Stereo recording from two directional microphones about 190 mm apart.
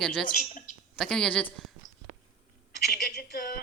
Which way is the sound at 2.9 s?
60° left (ahead or behind).